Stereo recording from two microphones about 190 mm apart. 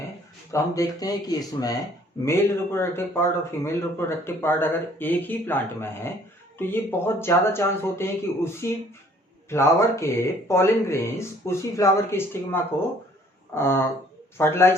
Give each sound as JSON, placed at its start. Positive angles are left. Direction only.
{"t": 0.5, "sound": "speech", "side_deg": 15}